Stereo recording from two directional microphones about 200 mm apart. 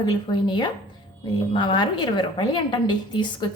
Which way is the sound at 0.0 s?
25° left (ahead or behind).